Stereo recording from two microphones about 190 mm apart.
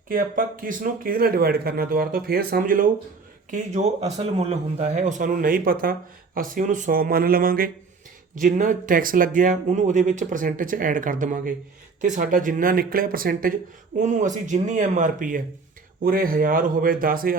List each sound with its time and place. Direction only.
0.1 s speech: 50° right (ahead or behind)